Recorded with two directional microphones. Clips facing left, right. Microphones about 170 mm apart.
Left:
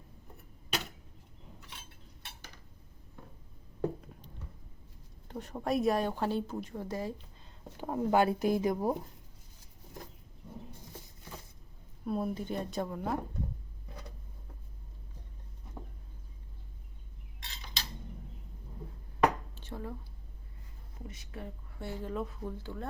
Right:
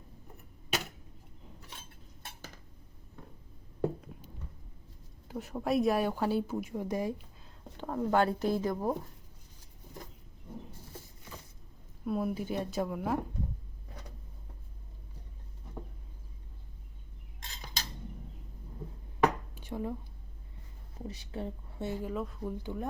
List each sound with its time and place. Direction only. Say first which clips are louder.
3.8 s a sound: right 2 dB; 5° right (ahead or behind)
5.3 s a woman's voice: right 2 dB; 5° right (ahead or behind)
7.8 s speech: left 1 dB; 10° left (ahead or behind)
12.0 s a woman's voice: right 1 dB; 5° right (ahead or behind)
17.4 s cutlery: right 2 dB; 45° right (ahead or behind)
19.5 s a sound: right 5 dB; 15° right (ahead or behind)
21.1 s speech: right 6 dB; 30° right (ahead or behind)
22.1 s speech: even; centre (ahead or behind)
22.4 s a woman's voice: right 3 dB; 15° right (ahead or behind)